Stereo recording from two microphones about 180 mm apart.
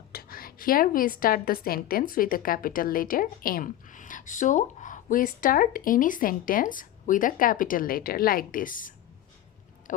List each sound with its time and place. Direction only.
0.1 s a woman's voice: 55° left (ahead or behind)